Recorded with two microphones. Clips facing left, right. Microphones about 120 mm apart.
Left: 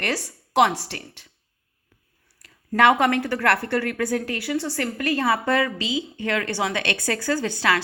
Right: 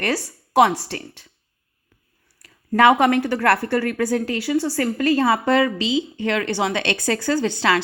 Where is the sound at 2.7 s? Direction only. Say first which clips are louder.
Right 3 dB; 25° right (ahead or behind).